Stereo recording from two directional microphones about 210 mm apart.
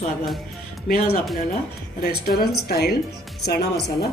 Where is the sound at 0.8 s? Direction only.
45° left (ahead or behind).